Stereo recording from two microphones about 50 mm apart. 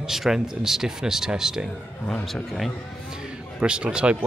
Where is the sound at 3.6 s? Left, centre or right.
Centre.